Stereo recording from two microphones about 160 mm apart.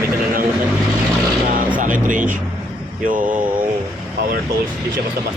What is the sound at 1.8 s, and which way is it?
Speech, 55° right (ahead or behind).